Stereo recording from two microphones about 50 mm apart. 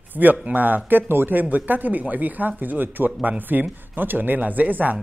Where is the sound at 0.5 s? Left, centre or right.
Right.